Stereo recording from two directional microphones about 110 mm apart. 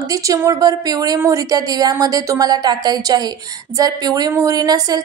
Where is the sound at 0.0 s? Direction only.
30° right (ahead or behind).